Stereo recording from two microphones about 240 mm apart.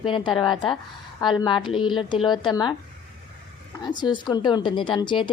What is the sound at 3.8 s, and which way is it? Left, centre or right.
A woman's voice, centre.